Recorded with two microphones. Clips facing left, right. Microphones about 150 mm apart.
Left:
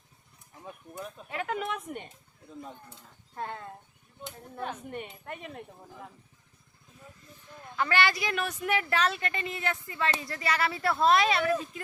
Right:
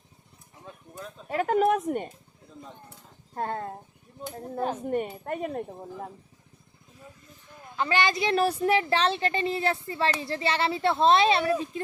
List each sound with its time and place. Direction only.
0.6 s a sound: 15° left (ahead or behind)
1.3 s speech: 40° right (ahead or behind)
3.3 s speech: 40° right (ahead or behind)
7.8 s speech: 20° right (ahead or behind)